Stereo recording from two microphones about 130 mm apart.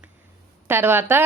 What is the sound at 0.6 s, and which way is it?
Speech, 15° right (ahead or behind).